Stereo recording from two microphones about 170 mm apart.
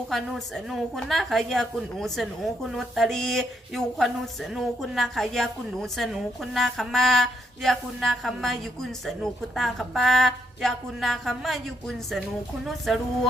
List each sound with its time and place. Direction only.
0.1 s a woman's voice: centre (ahead or behind)